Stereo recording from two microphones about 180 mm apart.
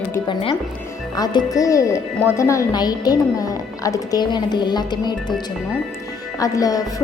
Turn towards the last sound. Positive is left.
turn(degrees=20)  # may be behind; listen again after turning